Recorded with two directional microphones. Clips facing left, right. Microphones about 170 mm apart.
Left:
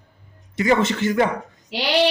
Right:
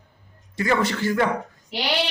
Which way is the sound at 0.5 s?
20° left (ahead or behind).